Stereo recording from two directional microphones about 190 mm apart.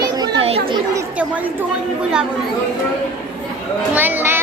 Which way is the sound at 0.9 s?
10° right (ahead or behind).